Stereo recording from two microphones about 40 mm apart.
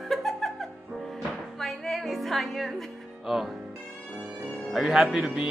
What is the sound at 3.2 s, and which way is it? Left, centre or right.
Speech, centre.